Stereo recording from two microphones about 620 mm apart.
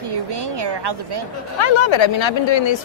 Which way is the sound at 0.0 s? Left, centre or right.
Right.